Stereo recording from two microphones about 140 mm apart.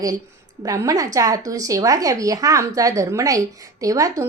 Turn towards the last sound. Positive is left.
turn(degrees=-25)  # may be behind; listen again after turning